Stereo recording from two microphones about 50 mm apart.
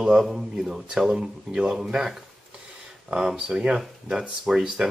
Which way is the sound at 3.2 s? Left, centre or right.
Centre.